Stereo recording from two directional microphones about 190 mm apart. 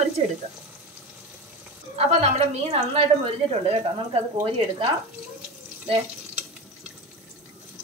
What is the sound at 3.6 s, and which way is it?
A woman's voice, 30° right (ahead or behind).